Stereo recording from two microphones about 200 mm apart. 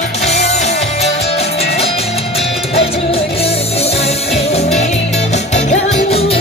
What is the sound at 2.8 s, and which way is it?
Music, 30° left (ahead or behind).